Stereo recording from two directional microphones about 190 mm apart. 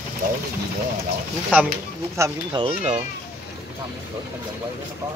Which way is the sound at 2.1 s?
15° right (ahead or behind).